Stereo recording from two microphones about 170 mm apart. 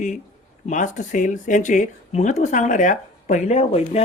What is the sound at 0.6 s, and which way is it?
Speech, 45° left (ahead or behind).